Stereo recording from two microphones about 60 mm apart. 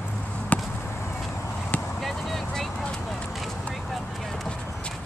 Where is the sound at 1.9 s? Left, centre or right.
Centre.